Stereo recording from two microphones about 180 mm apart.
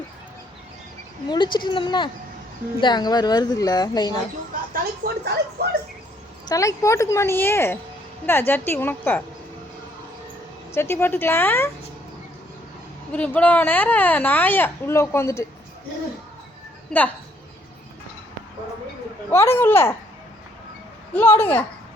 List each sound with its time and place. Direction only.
1.3 s a woman's voice: 25° left (ahead or behind)
4.7 s speech: 60° right (ahead or behind)
6.5 s speech: 15° left (ahead or behind)
10.7 s speech: 15° left (ahead or behind)
13.1 s speech: 10° left (ahead or behind)
19.3 s speech: 15° left (ahead or behind)
21.1 s speech: 10° left (ahead or behind)